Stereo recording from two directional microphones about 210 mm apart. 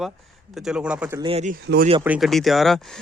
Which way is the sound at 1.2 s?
30° right (ahead or behind).